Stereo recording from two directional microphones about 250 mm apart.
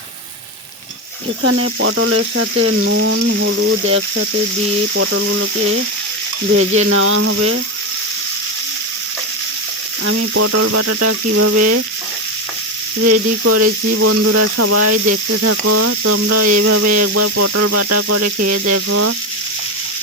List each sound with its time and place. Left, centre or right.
1.4 s speech: right
10.1 s speech: right
13.0 s speech: right